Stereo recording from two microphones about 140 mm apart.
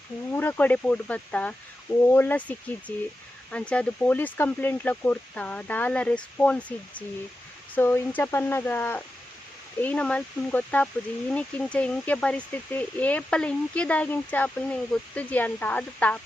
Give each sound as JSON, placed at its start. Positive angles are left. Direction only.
{"t": 0.3, "sound": "speech", "side_deg": 15}